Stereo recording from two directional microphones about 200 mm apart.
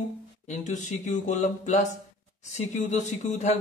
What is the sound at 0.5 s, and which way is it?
A man's voice, 35° left (ahead or behind).